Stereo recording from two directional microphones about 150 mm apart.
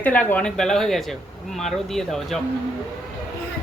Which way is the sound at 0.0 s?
10° left (ahead or behind).